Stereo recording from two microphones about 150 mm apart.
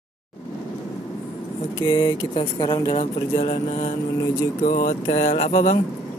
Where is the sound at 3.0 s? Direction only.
55° left (ahead or behind).